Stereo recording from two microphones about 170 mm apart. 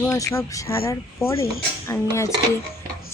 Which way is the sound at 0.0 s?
15° left (ahead or behind).